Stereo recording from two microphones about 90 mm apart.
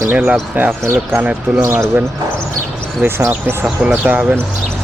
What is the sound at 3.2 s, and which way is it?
Speech, 30° right (ahead or behind).